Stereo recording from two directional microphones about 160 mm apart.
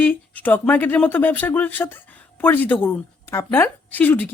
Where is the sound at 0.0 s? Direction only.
10° left (ahead or behind).